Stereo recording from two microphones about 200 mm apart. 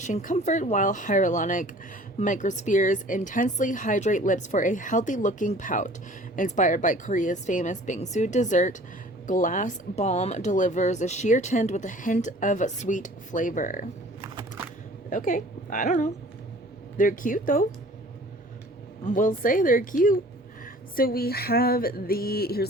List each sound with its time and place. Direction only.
0.0 s speech: 40° left (ahead or behind)
15.1 s speech: 40° left (ahead or behind)
19.0 s speech: 40° left (ahead or behind)
20.9 s a sound: 45° left (ahead or behind)